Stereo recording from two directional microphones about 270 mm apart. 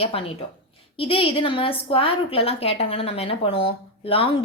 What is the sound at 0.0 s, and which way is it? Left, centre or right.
A woman's voice, left.